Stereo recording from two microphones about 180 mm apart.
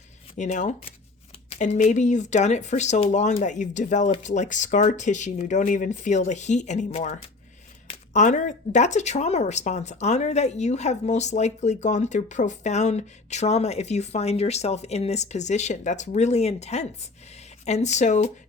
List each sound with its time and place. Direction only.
0.3 s speech: 40° left (ahead or behind)